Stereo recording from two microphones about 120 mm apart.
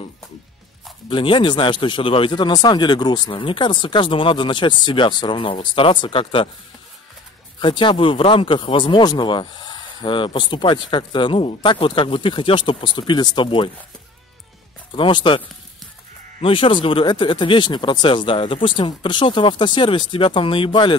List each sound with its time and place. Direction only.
1.0 s speech: 45° left (ahead or behind)
7.6 s speech: 45° left (ahead or behind)
14.9 s speech: 40° left (ahead or behind)